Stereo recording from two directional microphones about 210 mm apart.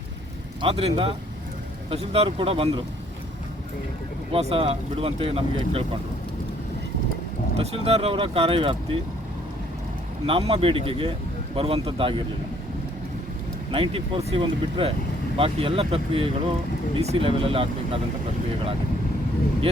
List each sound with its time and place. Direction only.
0.6 s speech: 30° right (ahead or behind)
4.3 s speech: 30° right (ahead or behind)
7.5 s speech: 30° right (ahead or behind)
10.2 s speech: 25° right (ahead or behind)
13.7 s speech: 25° right (ahead or behind)